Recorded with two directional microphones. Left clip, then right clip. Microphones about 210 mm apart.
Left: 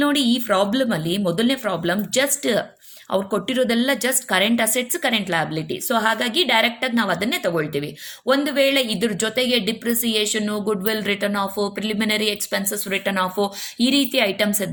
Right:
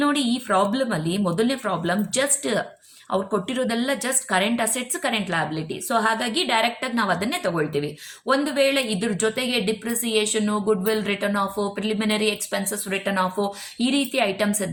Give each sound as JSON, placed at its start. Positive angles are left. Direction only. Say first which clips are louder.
{"t": 0.0, "sound": "a woman's voice", "louder": "left 3 dB", "side_deg": 35}